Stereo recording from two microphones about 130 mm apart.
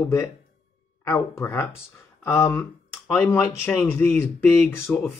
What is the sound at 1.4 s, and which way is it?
Speech, 20° left (ahead or behind).